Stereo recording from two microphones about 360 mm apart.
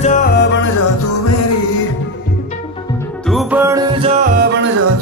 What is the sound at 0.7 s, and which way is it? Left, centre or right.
Music, left.